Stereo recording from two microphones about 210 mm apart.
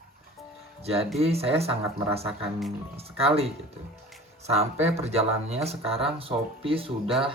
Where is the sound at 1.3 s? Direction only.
30° right (ahead or behind).